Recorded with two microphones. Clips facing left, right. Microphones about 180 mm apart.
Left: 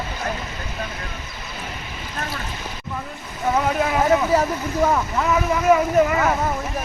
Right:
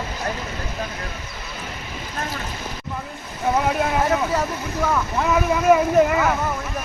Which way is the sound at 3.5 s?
Centre (ahead or behind).